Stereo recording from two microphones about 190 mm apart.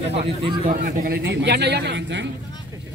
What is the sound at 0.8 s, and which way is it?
A man's voice, 55° right (ahead or behind).